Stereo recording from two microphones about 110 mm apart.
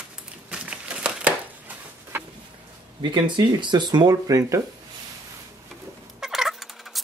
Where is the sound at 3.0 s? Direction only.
45° right (ahead or behind).